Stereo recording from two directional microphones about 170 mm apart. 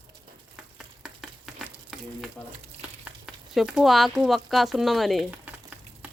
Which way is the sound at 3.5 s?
Centre (ahead or behind).